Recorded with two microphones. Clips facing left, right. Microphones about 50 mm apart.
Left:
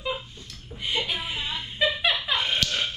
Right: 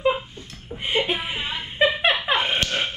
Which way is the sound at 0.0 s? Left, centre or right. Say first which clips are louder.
Right 9 dB; right.